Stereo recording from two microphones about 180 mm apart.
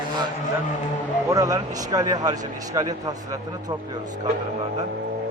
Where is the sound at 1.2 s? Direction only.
20° right (ahead or behind).